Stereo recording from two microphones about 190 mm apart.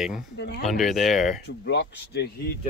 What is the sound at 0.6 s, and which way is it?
Speech, centre (ahead or behind).